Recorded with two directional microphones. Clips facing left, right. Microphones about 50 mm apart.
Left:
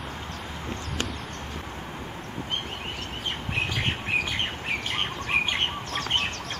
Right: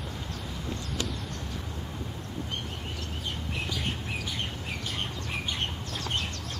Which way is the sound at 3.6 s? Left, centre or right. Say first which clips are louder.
Left 7 dB; left.